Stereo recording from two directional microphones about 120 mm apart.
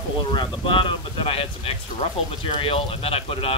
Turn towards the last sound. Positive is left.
turn(degrees=50)  # may be behind; listen again after turning